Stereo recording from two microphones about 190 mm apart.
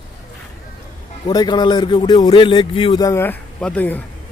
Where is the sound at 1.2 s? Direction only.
25° left (ahead or behind).